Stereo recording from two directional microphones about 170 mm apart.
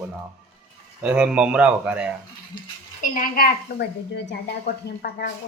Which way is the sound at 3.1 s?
60° left (ahead or behind).